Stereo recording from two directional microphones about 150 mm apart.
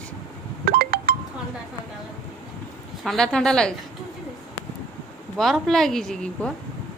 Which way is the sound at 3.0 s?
5° left (ahead or behind).